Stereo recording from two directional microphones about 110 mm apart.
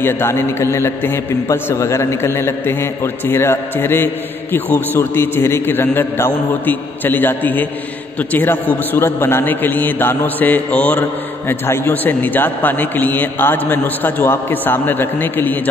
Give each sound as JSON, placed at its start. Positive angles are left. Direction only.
{"t": 0.0, "sound": "a man's voice", "side_deg": 20}